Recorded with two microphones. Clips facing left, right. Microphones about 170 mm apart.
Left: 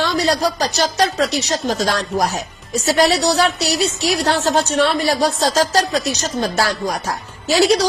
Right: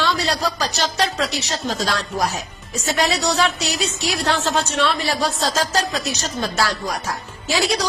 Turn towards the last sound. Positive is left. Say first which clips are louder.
# left 7 dB
turn(degrees=35)  # may be behind; listen again after turning